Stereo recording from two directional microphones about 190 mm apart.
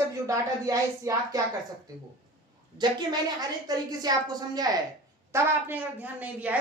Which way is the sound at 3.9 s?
20° right (ahead or behind).